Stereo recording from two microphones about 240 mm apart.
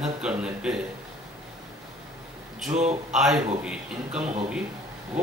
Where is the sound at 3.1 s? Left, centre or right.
Centre.